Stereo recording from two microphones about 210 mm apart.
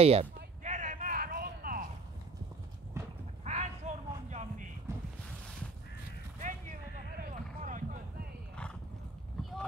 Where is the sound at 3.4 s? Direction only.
30° right (ahead or behind).